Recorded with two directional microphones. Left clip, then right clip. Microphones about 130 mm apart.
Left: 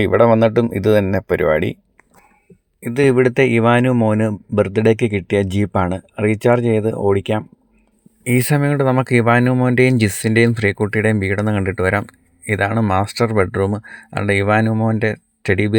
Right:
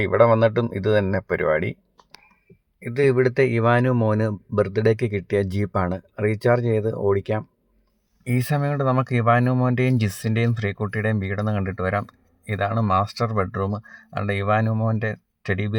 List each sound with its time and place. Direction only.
0.2 s speech: 30° left (ahead or behind)
2.8 s speech: 30° left (ahead or behind)
3.6 s speech: 15° left (ahead or behind)
4.5 s speech: 25° left (ahead or behind)
5.9 s speech: 10° left (ahead or behind)
6.2 s speech: 25° left (ahead or behind)
8.2 s speech: 35° left (ahead or behind)
9.7 s speech: 35° left (ahead or behind)